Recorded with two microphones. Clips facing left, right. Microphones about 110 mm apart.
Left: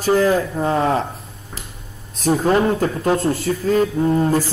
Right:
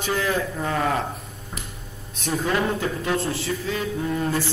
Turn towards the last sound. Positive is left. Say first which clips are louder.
# left 7 dB
turn(degrees=35)  # may be behind; listen again after turning